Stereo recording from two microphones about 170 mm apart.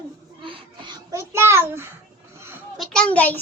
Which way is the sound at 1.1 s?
15° right (ahead or behind).